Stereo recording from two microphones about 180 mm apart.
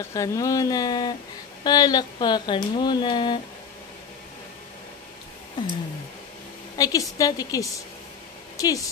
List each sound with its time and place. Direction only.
0.1 s speech: 20° left (ahead or behind)
6.8 s speech: 20° left (ahead or behind)